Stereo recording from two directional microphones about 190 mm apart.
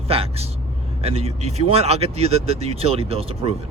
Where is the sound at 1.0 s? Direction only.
35° right (ahead or behind).